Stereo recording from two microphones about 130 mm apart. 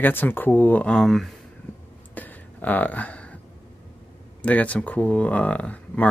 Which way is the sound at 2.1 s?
15° left (ahead or behind).